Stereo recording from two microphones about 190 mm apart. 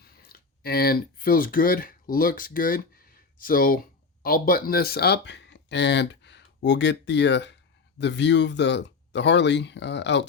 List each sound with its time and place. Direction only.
0.0 s speech: 55° left (ahead or behind)